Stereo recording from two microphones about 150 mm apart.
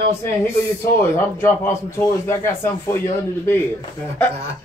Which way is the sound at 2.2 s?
15° left (ahead or behind).